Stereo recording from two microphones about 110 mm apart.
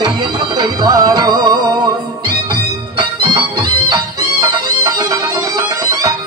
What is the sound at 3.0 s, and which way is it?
Music, 50° right (ahead or behind).